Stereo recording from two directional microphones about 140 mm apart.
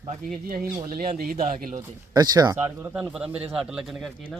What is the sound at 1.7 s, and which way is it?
Speech, 25° right (ahead or behind).